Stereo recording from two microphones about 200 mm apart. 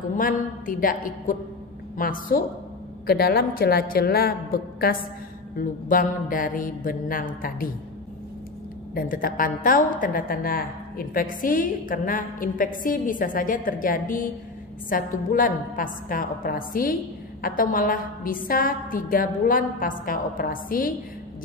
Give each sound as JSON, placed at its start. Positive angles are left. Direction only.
{"t": 0.2, "sound": "a woman's voice", "side_deg": 45}
{"t": 8.9, "sound": "a woman's voice", "side_deg": 45}